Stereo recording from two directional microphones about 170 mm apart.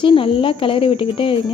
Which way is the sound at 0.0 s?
30° left (ahead or behind).